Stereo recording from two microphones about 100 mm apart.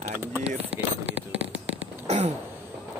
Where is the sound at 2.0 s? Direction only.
90° right.